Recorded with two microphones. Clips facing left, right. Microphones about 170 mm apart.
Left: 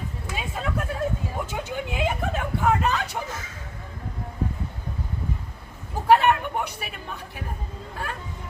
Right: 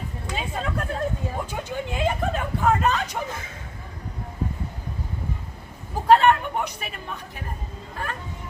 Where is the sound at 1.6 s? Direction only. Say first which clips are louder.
Right 3 dB; 10° left (ahead or behind).